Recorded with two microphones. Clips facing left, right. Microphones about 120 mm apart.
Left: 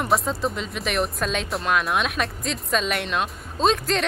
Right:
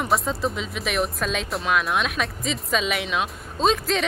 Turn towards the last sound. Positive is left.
turn(degrees=0)  # may be behind; listen again after turning